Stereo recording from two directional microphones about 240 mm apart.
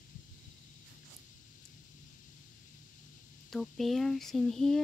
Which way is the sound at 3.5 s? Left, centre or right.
Centre.